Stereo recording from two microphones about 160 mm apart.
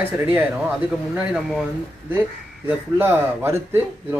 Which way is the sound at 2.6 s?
10° right (ahead or behind).